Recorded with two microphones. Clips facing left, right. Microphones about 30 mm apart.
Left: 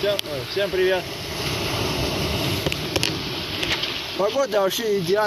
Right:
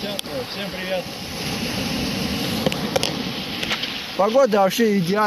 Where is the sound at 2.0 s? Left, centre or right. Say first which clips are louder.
Even; left.